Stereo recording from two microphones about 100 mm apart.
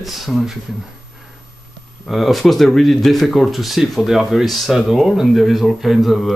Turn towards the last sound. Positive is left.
turn(degrees=0)  # may be behind; listen again after turning